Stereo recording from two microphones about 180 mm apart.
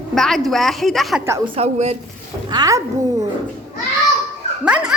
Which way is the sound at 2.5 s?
20° right (ahead or behind).